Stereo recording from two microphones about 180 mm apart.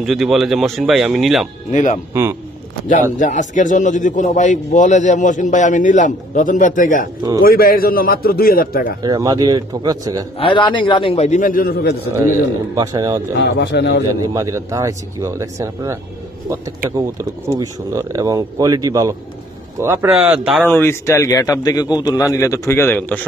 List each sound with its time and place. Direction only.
0.0 s speech: centre (ahead or behind)
1.7 s a man's voice: 45° left (ahead or behind)
9.0 s speech: 20° right (ahead or behind)
10.4 s a man's voice: 25° left (ahead or behind); by 12.1 s 60° left (ahead or behind)
12.7 s speech: 20° right (ahead or behind)
13.4 s a man's voice: 70° left (ahead or behind)
14.2 s speech: 20° right (ahead or behind)
17.2 s speech: 15° right (ahead or behind)
20.6 s a man's voice: 10° left (ahead or behind)